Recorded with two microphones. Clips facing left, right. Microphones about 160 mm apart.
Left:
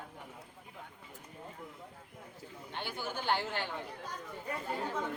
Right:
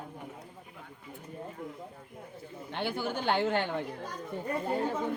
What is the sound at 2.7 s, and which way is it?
Speech, 55° right (ahead or behind).